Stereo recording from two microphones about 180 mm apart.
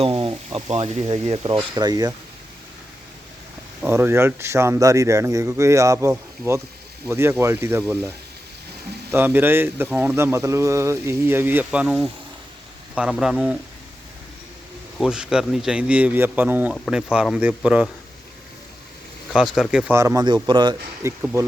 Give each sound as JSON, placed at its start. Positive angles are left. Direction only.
{"t": 0.0, "sound": "speech", "side_deg": -30}
{"t": 1.5, "sound": "speech", "side_deg": -20}
{"t": 3.8, "sound": "speech", "side_deg": -10}
{"t": 9.1, "sound": "speech", "side_deg": -10}
{"t": 14.9, "sound": "speech", "side_deg": -5}
{"t": 19.3, "sound": "speech", "side_deg": 0}
{"t": 19.9, "sound": "speech", "side_deg": -15}